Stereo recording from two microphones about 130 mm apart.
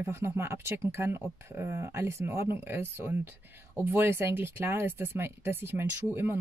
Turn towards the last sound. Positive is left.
turn(degrees=-20)  # may be behind; listen again after turning